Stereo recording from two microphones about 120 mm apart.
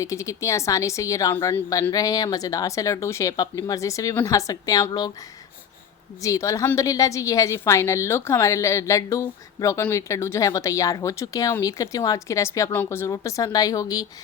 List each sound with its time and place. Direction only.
0.0 s a woman's voice: 25° left (ahead or behind)
6.2 s a woman's voice: 25° left (ahead or behind)